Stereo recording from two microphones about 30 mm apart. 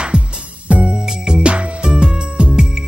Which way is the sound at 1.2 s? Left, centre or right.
Right.